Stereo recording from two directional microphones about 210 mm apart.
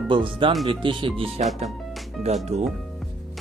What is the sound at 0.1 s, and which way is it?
Speech, 25° right (ahead or behind).